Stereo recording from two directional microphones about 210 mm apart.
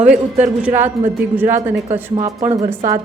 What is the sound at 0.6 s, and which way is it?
Speech, 10° right (ahead or behind).